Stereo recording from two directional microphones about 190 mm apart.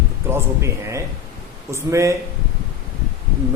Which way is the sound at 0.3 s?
15° right (ahead or behind).